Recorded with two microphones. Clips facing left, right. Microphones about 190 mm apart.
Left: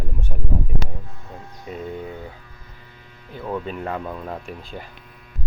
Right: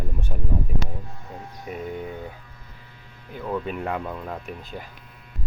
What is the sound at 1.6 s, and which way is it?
Speech, 15° right (ahead or behind).